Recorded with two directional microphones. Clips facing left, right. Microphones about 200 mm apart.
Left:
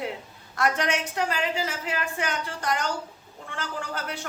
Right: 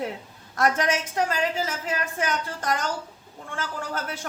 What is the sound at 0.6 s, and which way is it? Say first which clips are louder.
A woman's voice: right 2 dB; 45° right (ahead or behind).